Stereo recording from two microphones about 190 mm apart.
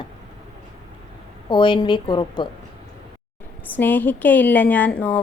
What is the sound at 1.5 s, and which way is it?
A woman's voice, 25° left (ahead or behind).